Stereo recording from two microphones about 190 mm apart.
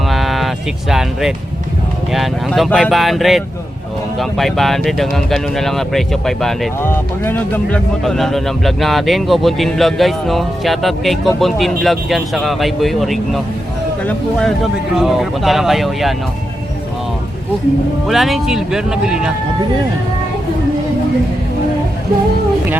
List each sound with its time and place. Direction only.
0.1 s a sound: centre (ahead or behind)
2.1 s speech: centre (ahead or behind)
18.1 s speech: centre (ahead or behind)